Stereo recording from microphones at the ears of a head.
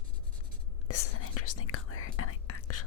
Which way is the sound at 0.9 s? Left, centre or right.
Left.